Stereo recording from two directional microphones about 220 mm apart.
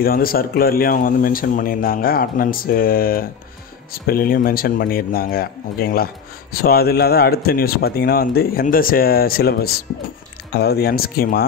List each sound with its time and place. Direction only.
0.0 s a man's voice: 40° left (ahead or behind)